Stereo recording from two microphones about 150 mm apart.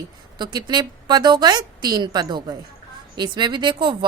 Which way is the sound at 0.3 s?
30° right (ahead or behind).